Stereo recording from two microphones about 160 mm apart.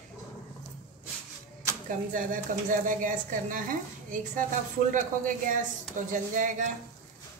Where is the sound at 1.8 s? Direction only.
55° right (ahead or behind).